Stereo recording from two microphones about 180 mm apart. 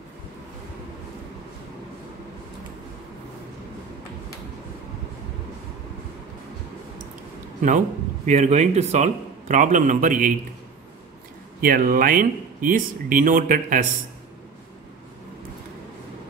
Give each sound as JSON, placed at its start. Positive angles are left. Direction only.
{"t": 7.6, "sound": "speech", "side_deg": -45}
{"t": 11.6, "sound": "speech", "side_deg": -50}